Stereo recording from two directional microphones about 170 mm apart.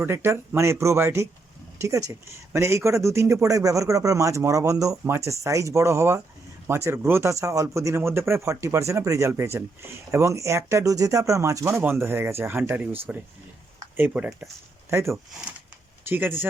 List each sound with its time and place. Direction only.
0.0 s speech: 15° right (ahead or behind)
14.8 s speech: 15° right (ahead or behind)